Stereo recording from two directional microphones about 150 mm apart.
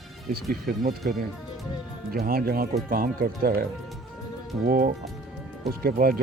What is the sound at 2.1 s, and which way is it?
Speech, 80° right.